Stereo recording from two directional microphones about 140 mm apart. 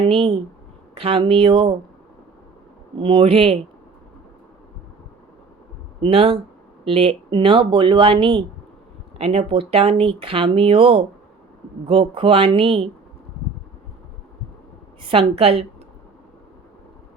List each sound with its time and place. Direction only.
0.0 s speech: 40° right (ahead or behind)
3.0 s speech: 40° right (ahead or behind)
6.0 s a woman's voice: 40° right (ahead or behind)
15.0 s a woman's voice: 45° right (ahead or behind)